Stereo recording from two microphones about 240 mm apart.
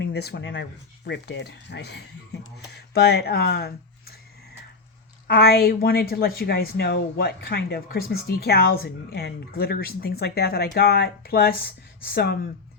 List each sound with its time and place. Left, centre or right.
0.0 s speech: left
2.3 s a sound: left
2.7 s speech: left
5.3 s a woman's voice: left